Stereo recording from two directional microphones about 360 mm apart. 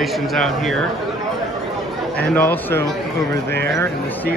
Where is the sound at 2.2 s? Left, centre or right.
Centre.